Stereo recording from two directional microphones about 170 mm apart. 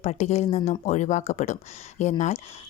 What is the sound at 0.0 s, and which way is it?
Speech, 40° left (ahead or behind).